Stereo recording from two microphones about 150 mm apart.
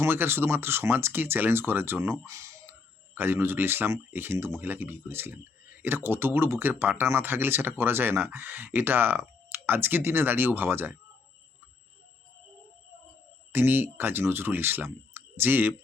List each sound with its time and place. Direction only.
0.0 s speech: 15° right (ahead or behind)
13.5 s speech: 15° right (ahead or behind)